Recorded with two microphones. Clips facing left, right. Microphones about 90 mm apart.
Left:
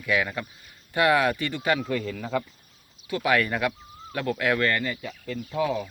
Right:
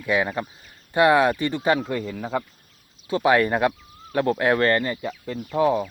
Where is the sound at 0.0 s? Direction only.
25° right (ahead or behind).